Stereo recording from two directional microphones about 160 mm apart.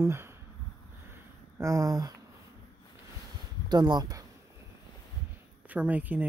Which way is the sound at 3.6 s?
25° right (ahead or behind).